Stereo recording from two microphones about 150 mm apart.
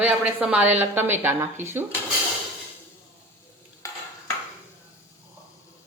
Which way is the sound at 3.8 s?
20° left (ahead or behind).